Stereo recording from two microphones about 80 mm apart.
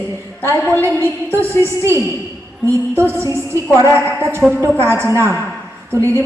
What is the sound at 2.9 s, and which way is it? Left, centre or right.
Music, right.